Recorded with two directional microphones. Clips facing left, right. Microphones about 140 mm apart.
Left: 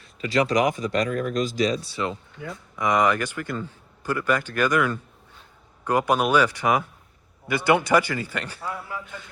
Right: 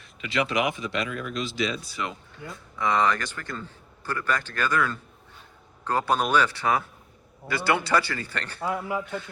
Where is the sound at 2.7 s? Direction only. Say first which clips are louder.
Left 2 dB; 15° left (ahead or behind).